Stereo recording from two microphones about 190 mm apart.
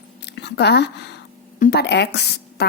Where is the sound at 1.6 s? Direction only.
45° left (ahead or behind).